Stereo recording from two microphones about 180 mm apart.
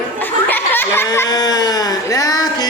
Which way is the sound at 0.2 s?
10° left (ahead or behind).